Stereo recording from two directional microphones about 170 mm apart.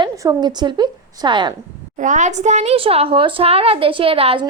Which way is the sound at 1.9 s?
45° right (ahead or behind).